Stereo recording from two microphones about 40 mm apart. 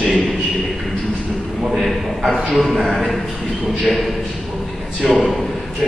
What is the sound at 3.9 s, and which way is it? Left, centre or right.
Speech, left.